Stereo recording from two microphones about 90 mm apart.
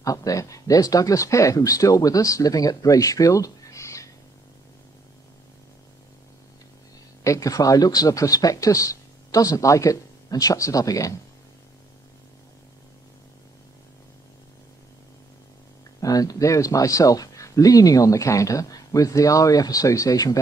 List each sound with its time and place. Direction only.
0.0 s speech: 40° left (ahead or behind)
7.2 s speech: 40° left (ahead or behind)
16.0 s speech: 45° left (ahead or behind)